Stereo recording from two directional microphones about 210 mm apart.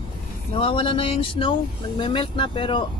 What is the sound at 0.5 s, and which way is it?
Speech, 25° left (ahead or behind).